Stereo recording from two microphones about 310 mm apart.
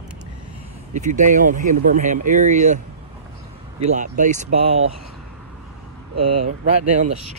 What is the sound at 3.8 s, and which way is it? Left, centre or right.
Speech, right.